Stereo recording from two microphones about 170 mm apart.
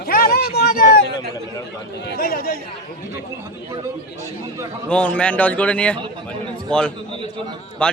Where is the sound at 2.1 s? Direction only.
60° left (ahead or behind).